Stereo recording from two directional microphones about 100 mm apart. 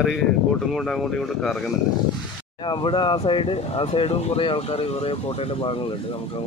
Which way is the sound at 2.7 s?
55° left (ahead or behind).